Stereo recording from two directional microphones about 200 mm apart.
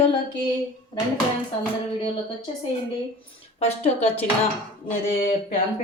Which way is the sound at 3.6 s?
30° left (ahead or behind).